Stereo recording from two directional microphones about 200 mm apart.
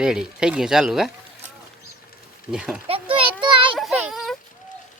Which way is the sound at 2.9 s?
25° right (ahead or behind).